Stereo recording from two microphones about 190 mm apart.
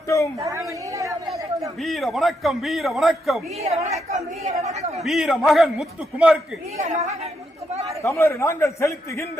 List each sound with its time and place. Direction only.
0.3 s a woman's voice: 15° right (ahead or behind)
1.8 s a man's voice: centre (ahead or behind)
3.6 s speech: 35° right (ahead or behind)
5.0 s a man's voice: centre (ahead or behind)
6.7 s speech: 40° right (ahead or behind)
8.0 s a man's voice: 15° left (ahead or behind)